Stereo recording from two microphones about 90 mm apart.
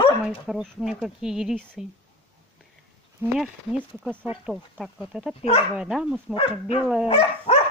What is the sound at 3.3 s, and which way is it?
Speech, 10° right (ahead or behind).